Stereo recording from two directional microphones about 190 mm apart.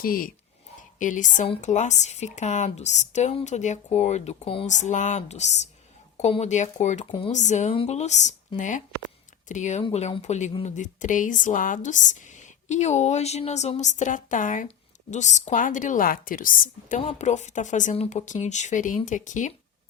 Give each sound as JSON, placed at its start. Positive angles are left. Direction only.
{"t": 0.0, "sound": "a woman's voice", "side_deg": 50}